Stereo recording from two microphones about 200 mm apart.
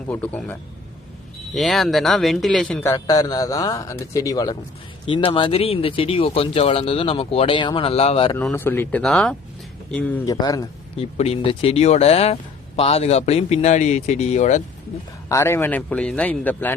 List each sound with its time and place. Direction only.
0.1 s speech: 5° left (ahead or behind)
1.5 s speech: centre (ahead or behind); by 8.4 s 25° left (ahead or behind)
8.4 s speech: 10° left (ahead or behind)
10.2 s speech: 20° left (ahead or behind)
11.0 s speech: 30° left (ahead or behind)
15.3 s speech: 15° left (ahead or behind)